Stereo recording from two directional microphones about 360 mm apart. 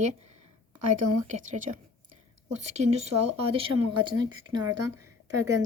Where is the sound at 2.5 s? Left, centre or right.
Centre.